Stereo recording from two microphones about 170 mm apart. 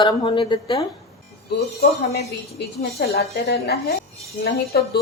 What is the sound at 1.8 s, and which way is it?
A woman's voice, 75° left (ahead or behind).